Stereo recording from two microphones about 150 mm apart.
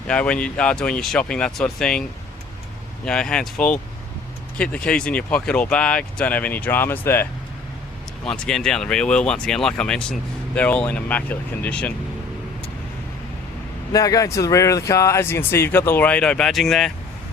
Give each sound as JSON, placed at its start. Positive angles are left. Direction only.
{"t": 0.1, "sound": "speech", "side_deg": 10}
{"t": 3.1, "sound": "speech", "side_deg": 5}
{"t": 13.9, "sound": "speech", "side_deg": 25}